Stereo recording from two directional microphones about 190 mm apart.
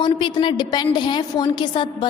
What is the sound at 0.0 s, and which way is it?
A woman's voice, 25° left (ahead or behind).